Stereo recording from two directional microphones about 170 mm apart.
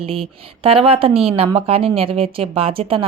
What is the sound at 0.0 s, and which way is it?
A woman's voice, 35° right (ahead or behind).